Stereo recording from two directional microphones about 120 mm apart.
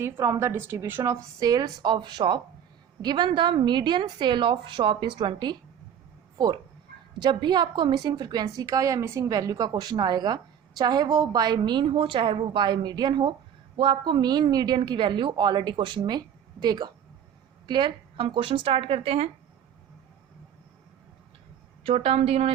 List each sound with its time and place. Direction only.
0.0 s a woman's voice: 25° right (ahead or behind); by 5.5 s 40° right (ahead or behind)
7.2 s a woman's voice: 40° right (ahead or behind); by 19.3 s 55° right (ahead or behind)
21.8 s a woman's voice: 55° right (ahead or behind)